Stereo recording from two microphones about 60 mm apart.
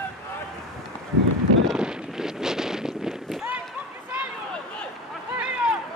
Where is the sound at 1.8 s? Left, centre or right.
Centre.